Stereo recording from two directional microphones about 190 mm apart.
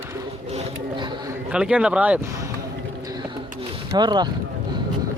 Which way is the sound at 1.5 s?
5° right (ahead or behind).